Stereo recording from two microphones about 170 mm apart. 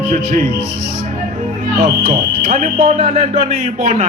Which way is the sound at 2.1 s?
45° right (ahead or behind).